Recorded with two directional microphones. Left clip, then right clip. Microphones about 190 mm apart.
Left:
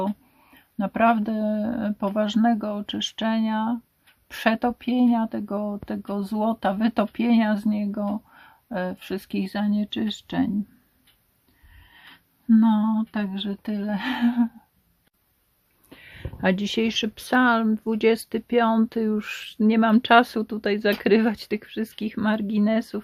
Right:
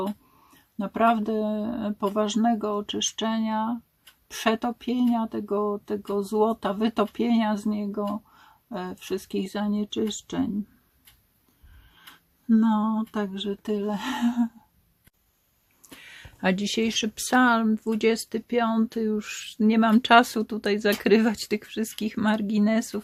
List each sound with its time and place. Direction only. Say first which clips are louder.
0.5 s speech: left 3 dB; 35° left (ahead or behind)
12.1 s speech: left 3 dB; 35° left (ahead or behind)
15.9 s speech: left 2 dB; centre (ahead or behind)